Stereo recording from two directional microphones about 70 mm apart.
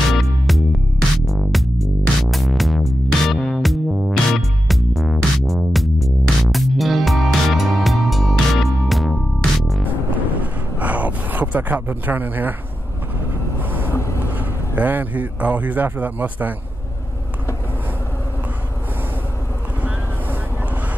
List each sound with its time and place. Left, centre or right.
0.1 s music: centre
10.3 s a sound: right
13.6 s vehicle: right
13.9 s vehicle: left
14.8 s speech: right